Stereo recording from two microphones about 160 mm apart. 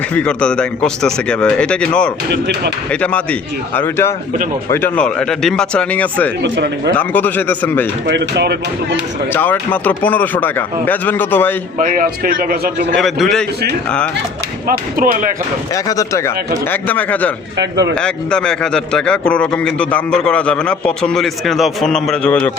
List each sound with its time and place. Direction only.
0.1 s speech: 5° left (ahead or behind)
6.4 s speech: 90° right
6.9 s speech: 10° left (ahead or behind)
8.0 s speech: 90° right
9.3 s speech: 10° left (ahead or behind)
11.8 s speech: 55° right (ahead or behind)
13.0 s a man's voice: centre (ahead or behind)
14.7 s speech: 65° right (ahead or behind)
15.7 s speech: 20° left (ahead or behind)
17.6 s speech: 90° right
17.9 s a man's voice: 5° left (ahead or behind)